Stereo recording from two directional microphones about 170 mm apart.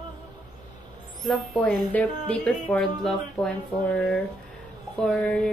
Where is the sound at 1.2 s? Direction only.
5° left (ahead or behind).